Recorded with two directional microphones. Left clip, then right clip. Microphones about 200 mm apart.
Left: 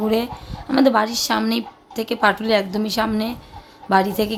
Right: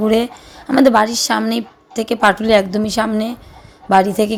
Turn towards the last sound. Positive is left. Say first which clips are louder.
# right 5 dB
turn(degrees=-20)  # may be behind; listen again after turning